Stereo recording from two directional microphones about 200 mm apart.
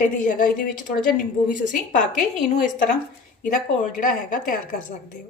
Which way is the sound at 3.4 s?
40° left (ahead or behind).